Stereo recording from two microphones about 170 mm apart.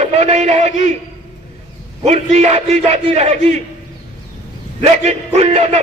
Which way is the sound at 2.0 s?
40° right (ahead or behind).